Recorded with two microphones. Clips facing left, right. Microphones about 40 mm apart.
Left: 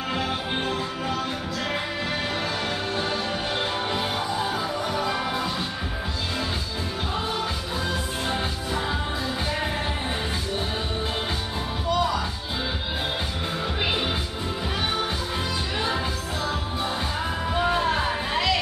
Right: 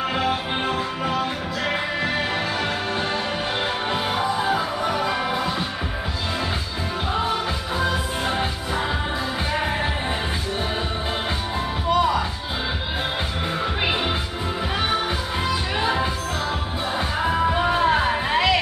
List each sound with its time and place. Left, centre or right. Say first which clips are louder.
0.1 s music: right 4 dB; centre
3.9 s music: right 4 dB; centre
7.8 s music: right 5 dB; centre
11.9 s music: right 4 dB; centre
13.8 s music: right 2 dB; centre
15.8 s music: right 4 dB; centre
17.2 s music: right 6 dB; centre